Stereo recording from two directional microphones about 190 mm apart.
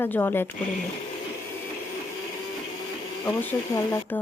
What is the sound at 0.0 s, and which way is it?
Speech, 10° left (ahead or behind).